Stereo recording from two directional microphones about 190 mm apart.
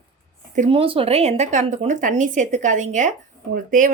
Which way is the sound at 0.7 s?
30° right (ahead or behind).